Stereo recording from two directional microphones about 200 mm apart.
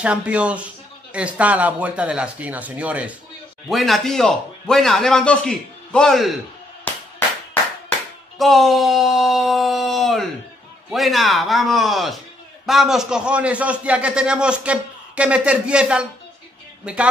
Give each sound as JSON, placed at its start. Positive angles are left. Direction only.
{"t": 0.0, "sound": "a man's voice", "side_deg": -5}
{"t": 8.4, "sound": "a man's voice", "side_deg": 0}